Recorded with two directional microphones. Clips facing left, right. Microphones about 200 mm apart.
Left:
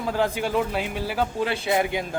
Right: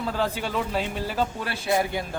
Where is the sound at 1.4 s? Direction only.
20° left (ahead or behind).